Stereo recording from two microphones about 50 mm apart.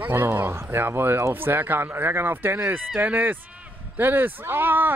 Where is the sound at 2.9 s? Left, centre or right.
Right.